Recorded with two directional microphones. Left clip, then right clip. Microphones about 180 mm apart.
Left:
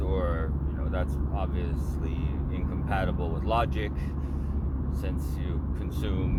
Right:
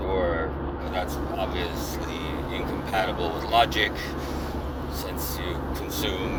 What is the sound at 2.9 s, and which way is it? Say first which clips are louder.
Speech: right 6 dB; 45° left (ahead or behind).